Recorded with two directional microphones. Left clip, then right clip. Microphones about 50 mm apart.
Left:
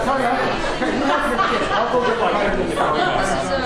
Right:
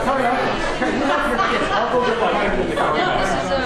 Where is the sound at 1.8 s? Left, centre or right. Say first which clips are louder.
Even; centre.